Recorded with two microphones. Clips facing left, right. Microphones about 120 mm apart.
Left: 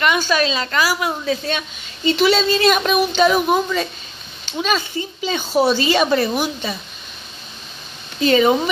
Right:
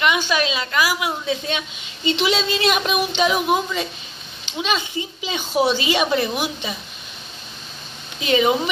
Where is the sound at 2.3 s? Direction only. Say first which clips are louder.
Left 4 dB; 15° right (ahead or behind).